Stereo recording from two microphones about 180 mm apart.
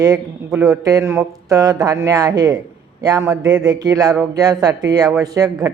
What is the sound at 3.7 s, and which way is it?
A woman's voice, 20° right (ahead or behind).